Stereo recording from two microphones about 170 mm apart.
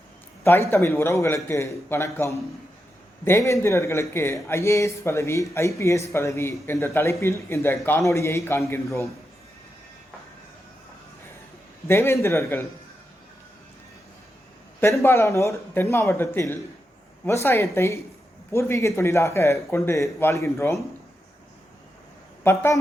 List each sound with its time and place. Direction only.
0.7 s speech: 15° left (ahead or behind)
11.9 s speech: 15° left (ahead or behind)
14.8 s speech: 15° left (ahead or behind)
22.4 s speech: 15° left (ahead or behind)